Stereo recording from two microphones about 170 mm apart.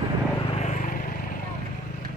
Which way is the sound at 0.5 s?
45° left (ahead or behind).